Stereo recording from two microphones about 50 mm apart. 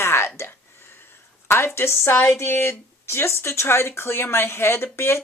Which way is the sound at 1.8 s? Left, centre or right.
Left.